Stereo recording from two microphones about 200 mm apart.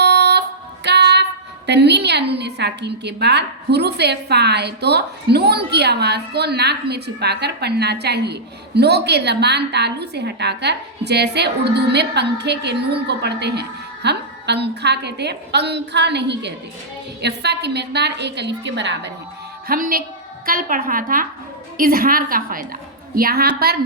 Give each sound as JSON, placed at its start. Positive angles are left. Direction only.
{"t": 0.0, "sound": "female singing", "side_deg": -55}
{"t": 0.9, "sound": "a woman's voice", "side_deg": -55}
{"t": 19.6, "sound": "a woman's voice", "side_deg": -45}